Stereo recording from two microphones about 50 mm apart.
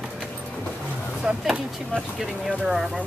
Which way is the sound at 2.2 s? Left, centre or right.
Centre.